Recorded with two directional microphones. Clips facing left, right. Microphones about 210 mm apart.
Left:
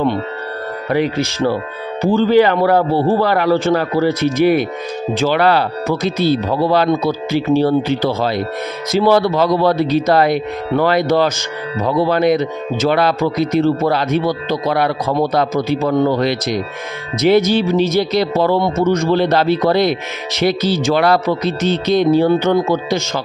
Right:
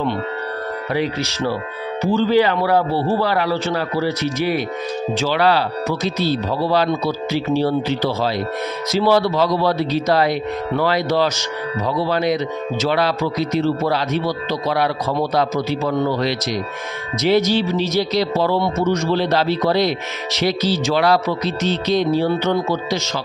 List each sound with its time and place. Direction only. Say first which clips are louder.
0.9 s speech: left 5 dB; 50° left (ahead or behind)